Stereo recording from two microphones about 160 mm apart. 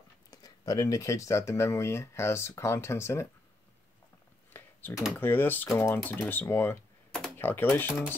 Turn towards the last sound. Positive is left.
turn(degrees=10)  # may be behind; listen again after turning